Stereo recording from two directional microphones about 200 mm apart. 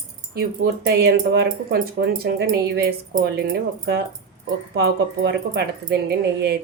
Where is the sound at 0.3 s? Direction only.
50° right (ahead or behind).